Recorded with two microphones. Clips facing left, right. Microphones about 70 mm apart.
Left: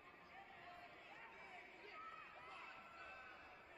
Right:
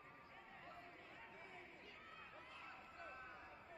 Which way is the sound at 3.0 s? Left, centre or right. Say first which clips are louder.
Right 5 dB; right.